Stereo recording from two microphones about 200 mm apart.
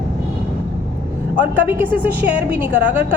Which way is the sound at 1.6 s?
10° right (ahead or behind).